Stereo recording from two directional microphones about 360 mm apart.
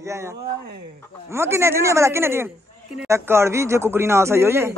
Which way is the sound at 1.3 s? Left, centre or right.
Centre.